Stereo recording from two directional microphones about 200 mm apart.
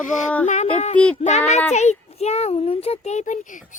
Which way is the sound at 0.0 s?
40° left (ahead or behind).